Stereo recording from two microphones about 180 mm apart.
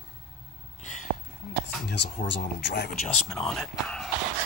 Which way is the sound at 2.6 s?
70° left (ahead or behind).